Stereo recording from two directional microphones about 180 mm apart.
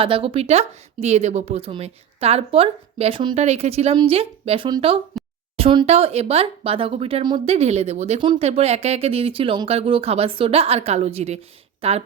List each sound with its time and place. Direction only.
0.0 s speech: 30° right (ahead or behind)
5.2 s a sound: centre (ahead or behind)
5.5 s speech: 30° right (ahead or behind)